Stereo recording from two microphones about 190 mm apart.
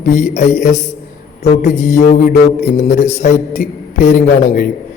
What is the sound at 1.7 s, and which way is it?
A man's voice, 35° left (ahead or behind).